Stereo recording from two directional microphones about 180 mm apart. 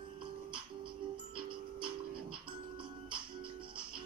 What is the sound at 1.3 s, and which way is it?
Music, 30° right (ahead or behind).